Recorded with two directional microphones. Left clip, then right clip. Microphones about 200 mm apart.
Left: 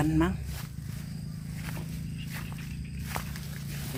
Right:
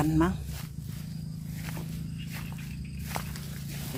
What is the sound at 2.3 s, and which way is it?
Walk, 5° right (ahead or behind).